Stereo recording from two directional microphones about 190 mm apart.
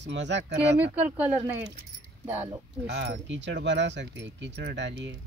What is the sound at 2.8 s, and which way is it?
Speech, 60° right (ahead or behind).